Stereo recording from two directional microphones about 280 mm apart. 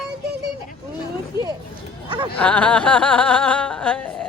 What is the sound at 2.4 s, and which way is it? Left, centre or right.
Speech, centre.